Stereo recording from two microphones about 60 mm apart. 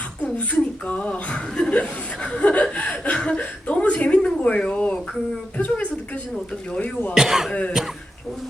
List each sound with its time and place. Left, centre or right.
0.2 s speech: left
3.2 s a sound: left
6.7 s speech: left
7.1 s speech: centre